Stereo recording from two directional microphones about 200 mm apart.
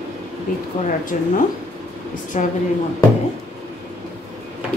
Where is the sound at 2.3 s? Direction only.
35° left (ahead or behind).